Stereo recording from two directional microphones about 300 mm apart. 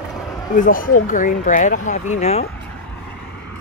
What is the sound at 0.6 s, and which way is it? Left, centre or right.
Speech, left.